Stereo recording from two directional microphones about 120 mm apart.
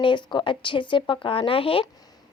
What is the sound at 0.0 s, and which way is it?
A woman's voice, 40° left (ahead or behind).